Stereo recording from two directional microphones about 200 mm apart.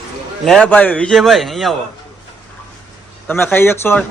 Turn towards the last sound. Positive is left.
turn(degrees=10)  # may be behind; listen again after turning